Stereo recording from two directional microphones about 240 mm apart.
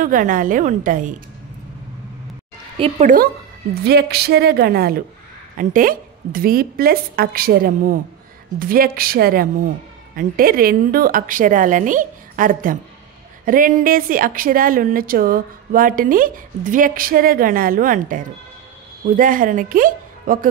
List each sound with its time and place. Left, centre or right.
0.0 s speech: right
2.8 s speech: right